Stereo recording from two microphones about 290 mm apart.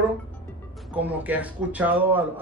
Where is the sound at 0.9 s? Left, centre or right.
Centre.